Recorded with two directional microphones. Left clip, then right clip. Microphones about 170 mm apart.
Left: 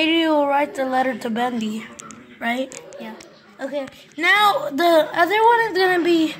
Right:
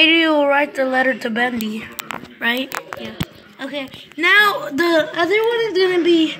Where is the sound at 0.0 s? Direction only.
Centre (ahead or behind); by 5.0 s 15° left (ahead or behind).